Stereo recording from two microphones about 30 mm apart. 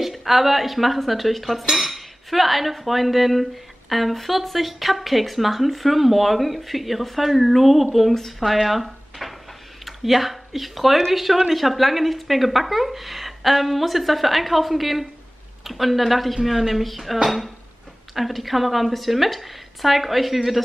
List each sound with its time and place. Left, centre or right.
0.0 s speech: centre
8.1 s speech: centre
8.4 s speech: centre